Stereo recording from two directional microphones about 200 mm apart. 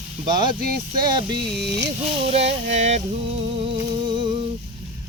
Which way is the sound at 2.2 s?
30° right (ahead or behind).